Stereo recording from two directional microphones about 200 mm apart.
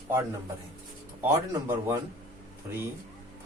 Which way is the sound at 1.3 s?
15° right (ahead or behind).